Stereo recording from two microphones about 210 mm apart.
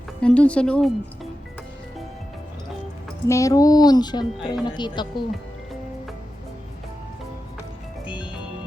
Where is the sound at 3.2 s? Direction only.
15° left (ahead or behind).